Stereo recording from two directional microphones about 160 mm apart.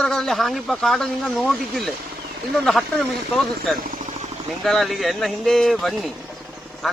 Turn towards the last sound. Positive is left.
turn(degrees=0)  # may be behind; listen again after turning